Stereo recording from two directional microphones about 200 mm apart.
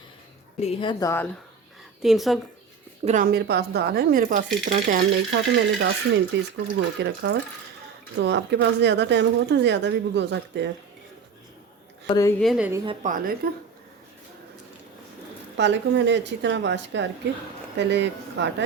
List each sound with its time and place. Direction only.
0.6 s a woman's voice: 25° left (ahead or behind)
2.0 s a woman's voice: centre (ahead or behind)
3.0 s a woman's voice: 35° right (ahead or behind)
3.2 s a woman's voice: 55° right (ahead or behind)
5.3 s speech: 60° right (ahead or behind)
12.0 s a woman's voice: 20° left (ahead or behind)
12.4 s a woman's voice: centre (ahead or behind)
12.8 s a woman's voice: 25° right (ahead or behind)
13.1 s a woman's voice: 45° right (ahead or behind)
15.5 s speech: 60° right (ahead or behind)